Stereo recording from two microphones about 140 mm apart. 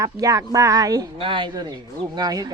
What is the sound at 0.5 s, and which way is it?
A woman's voice, 25° right (ahead or behind).